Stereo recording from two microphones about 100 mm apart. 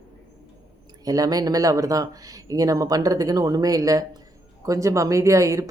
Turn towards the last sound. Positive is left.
turn(degrees=-30)  # may be behind; listen again after turning